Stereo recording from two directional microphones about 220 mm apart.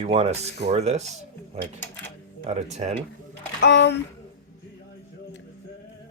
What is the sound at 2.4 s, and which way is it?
Speech, 30° right (ahead or behind).